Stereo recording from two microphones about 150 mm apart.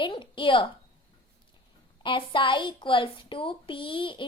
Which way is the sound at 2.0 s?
30° left (ahead or behind).